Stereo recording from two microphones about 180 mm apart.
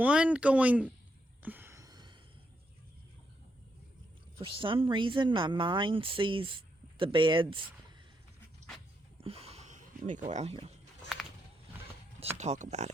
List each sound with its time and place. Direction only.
0.0 s speech: 5° right (ahead or behind)
1.4 s a sound: 10° right (ahead or behind)
4.4 s speech: 30° right (ahead or behind)
9.2 s speech: 35° right (ahead or behind)
12.4 s speech: 40° right (ahead or behind)